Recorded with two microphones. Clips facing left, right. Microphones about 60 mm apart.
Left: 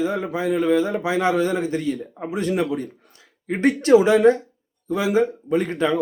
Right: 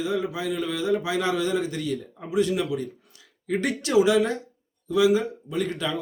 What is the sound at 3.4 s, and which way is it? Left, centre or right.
Speech, left.